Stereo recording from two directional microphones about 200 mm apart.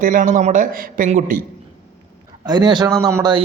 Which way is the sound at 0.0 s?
40° right (ahead or behind).